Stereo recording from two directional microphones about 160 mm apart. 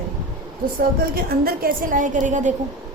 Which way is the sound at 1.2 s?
65° right (ahead or behind).